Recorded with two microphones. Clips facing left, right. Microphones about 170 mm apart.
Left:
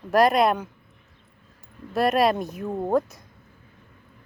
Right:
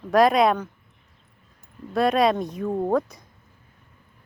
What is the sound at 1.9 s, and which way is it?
Speech, 5° left (ahead or behind).